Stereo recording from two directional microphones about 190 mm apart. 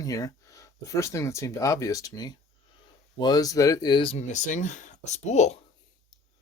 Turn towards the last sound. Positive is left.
turn(degrees=35)  # may be behind; listen again after turning